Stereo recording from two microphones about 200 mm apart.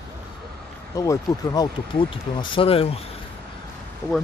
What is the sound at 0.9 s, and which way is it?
Speech, 15° left (ahead or behind).